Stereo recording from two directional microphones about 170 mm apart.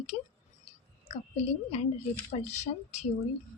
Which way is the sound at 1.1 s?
40° left (ahead or behind).